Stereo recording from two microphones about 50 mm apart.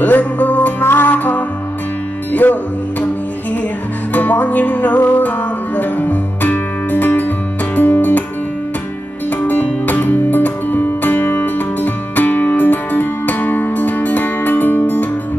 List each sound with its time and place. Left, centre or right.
0.0 s music: left
2.4 s music: left
4.1 s music: left
9.5 s music: left